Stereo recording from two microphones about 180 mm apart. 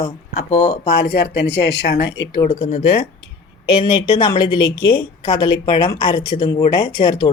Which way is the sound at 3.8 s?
25° left (ahead or behind).